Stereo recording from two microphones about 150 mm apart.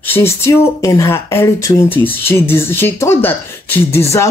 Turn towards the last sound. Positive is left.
turn(degrees=20)  # may be behind; listen again after turning